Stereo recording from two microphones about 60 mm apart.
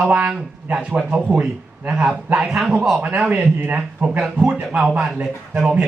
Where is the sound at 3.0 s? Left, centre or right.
Right.